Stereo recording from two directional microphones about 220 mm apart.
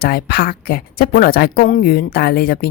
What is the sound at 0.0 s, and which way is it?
A woman's voice, 45° left (ahead or behind).